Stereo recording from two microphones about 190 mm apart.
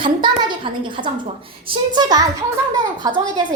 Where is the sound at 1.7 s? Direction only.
20° right (ahead or behind).